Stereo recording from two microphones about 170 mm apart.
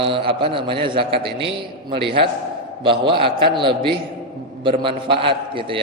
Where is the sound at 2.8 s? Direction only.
30° right (ahead or behind).